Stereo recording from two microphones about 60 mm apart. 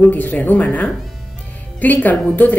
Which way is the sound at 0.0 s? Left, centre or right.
Left.